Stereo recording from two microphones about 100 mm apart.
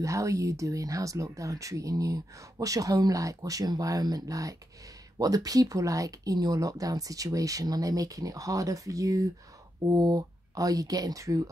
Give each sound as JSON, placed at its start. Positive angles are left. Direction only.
{"t": 0.0, "sound": "speech", "side_deg": -30}